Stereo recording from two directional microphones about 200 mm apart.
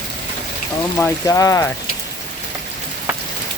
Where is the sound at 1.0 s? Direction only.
15° left (ahead or behind).